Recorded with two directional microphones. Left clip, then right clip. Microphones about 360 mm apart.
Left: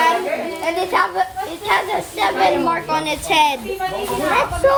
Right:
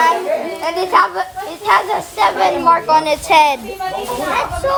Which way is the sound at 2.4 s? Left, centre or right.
Centre.